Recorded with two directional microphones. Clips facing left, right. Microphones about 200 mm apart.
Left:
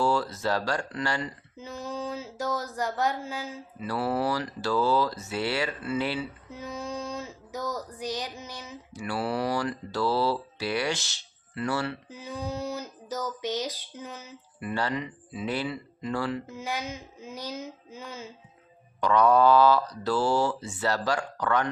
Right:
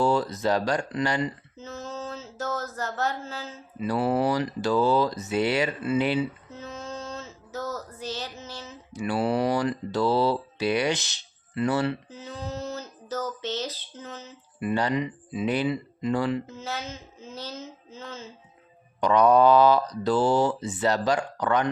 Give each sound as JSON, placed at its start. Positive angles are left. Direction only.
{"t": 0.0, "sound": "speech", "side_deg": -20}
{"t": 1.5, "sound": "a sound", "side_deg": 15}
{"t": 3.8, "sound": "speech", "side_deg": -20}
{"t": 6.5, "sound": "a sound", "side_deg": 15}
{"t": 8.9, "sound": "speech", "side_deg": -20}
{"t": 12.0, "sound": "speech", "side_deg": 15}
{"t": 14.6, "sound": "speech", "side_deg": -20}
{"t": 16.5, "sound": "speech", "side_deg": 15}
{"t": 18.9, "sound": "speech", "side_deg": -20}